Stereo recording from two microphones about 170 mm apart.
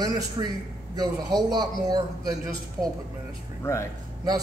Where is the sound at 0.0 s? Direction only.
20° right (ahead or behind).